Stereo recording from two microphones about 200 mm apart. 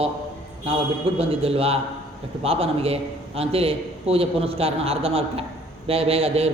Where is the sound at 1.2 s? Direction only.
30° right (ahead or behind).